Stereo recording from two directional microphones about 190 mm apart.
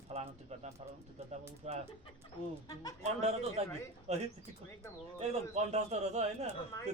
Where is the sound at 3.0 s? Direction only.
35° right (ahead or behind).